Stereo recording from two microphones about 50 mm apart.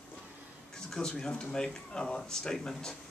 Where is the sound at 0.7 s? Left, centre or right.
Centre.